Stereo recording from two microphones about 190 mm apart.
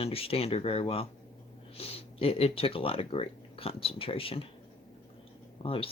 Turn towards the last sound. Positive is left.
turn(degrees=30)  # may be behind; listen again after turning